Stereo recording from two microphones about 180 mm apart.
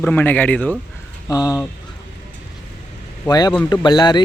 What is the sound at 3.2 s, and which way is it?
Speech, 20° left (ahead or behind).